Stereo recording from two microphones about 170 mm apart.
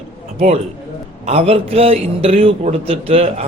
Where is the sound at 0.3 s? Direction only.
40° right (ahead or behind).